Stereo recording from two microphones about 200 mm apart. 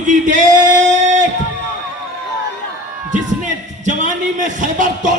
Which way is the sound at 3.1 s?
40° right (ahead or behind).